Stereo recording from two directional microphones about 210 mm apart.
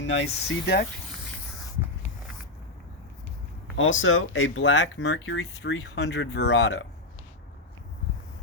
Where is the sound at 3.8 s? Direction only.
65° left (ahead or behind).